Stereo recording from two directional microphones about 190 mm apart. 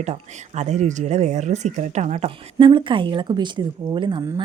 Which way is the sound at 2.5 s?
25° right (ahead or behind).